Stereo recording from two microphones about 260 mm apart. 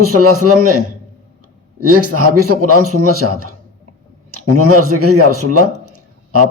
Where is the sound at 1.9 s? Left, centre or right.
Right.